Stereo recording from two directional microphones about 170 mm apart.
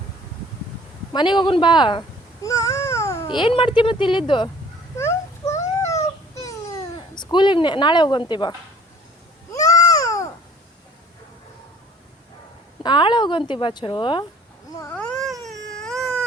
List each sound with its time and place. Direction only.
1.1 s baby cry: 25° left (ahead or behind)
3.2 s a woman's voice: 30° left (ahead or behind)
4.9 s a sound: 15° left (ahead or behind)
9.5 s babbling: 20° left (ahead or behind)
12.8 s a woman's voice: 25° left (ahead or behind)
14.8 s cat: 10° left (ahead or behind)